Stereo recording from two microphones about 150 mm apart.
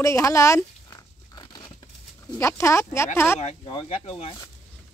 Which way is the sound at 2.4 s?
20° left (ahead or behind).